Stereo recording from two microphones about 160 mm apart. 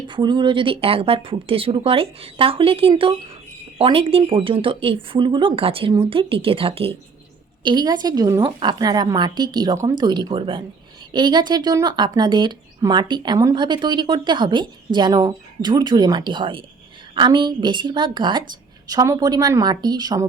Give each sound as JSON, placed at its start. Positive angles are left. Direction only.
{"t": 0.1, "sound": "speech", "side_deg": -30}